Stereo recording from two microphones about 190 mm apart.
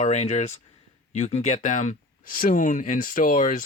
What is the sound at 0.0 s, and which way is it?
Speech, 35° left (ahead or behind).